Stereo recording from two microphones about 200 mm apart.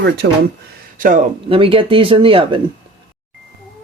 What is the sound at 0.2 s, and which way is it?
Speech, 60° right (ahead or behind).